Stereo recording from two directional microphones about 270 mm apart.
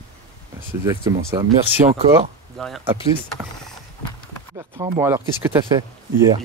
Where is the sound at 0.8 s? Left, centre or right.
Centre.